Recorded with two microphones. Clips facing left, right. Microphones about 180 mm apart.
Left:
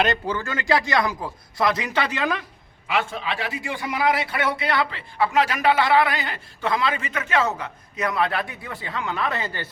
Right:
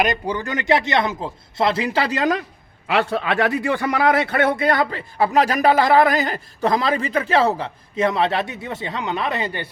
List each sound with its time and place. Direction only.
0.0 s speech: 15° right (ahead or behind); by 2.4 s 40° right (ahead or behind)
2.8 s a man's voice: 65° right (ahead or behind); by 9.6 s 15° right (ahead or behind)